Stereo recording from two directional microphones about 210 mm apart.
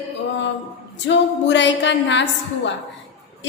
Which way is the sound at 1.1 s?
60° left (ahead or behind).